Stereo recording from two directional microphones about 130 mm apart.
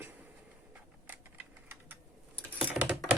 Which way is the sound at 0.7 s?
15° right (ahead or behind).